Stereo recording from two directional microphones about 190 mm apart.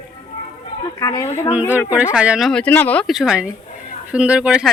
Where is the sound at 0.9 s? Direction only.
15° left (ahead or behind).